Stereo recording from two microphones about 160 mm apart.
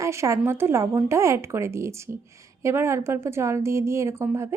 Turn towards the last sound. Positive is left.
turn(degrees=-15)  # may be behind; listen again after turning